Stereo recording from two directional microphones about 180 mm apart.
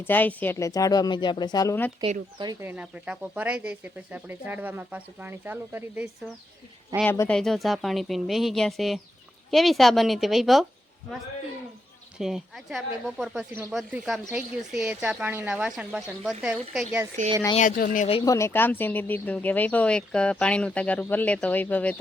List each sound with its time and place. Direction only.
0.0 s speech: 10° left (ahead or behind)
2.4 s speech: 20° right (ahead or behind)
2.6 s speech: 5° right (ahead or behind)
7.0 s a woman's voice: 10° left (ahead or behind)
12.2 s a woman's voice: centre (ahead or behind)
17.2 s speech: 45° right (ahead or behind)
17.6 s speech: 50° left (ahead or behind)
18.3 s speech: 15° left (ahead or behind)